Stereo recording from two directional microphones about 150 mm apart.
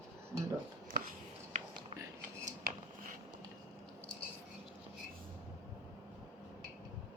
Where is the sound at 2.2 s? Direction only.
70° right (ahead or behind).